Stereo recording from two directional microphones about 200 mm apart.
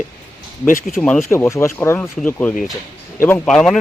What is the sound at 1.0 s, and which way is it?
Speech, 5° left (ahead or behind).